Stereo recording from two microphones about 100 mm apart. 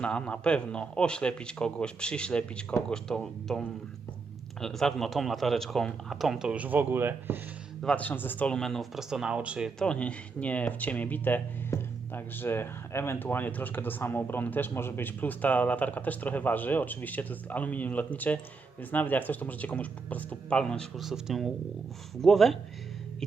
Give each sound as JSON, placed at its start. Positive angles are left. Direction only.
{"t": 0.0, "sound": "speech", "side_deg": 10}
{"t": 4.6, "sound": "speech", "side_deg": 5}
{"t": 7.9, "sound": "speech", "side_deg": 20}
{"t": 9.7, "sound": "speech", "side_deg": 10}
{"t": 21.0, "sound": "speech", "side_deg": -5}